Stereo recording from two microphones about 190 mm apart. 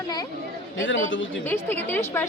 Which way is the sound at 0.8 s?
90° left.